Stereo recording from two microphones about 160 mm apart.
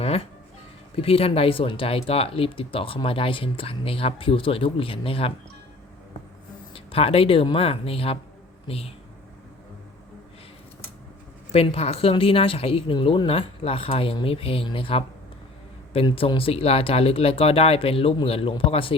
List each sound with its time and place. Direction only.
0.9 s speech: 35° left (ahead or behind)
6.7 s speech: 35° left (ahead or behind)
11.5 s speech: 35° left (ahead or behind)